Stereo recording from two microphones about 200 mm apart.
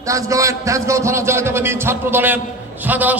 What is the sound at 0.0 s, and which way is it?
A man's voice, 15° right (ahead or behind).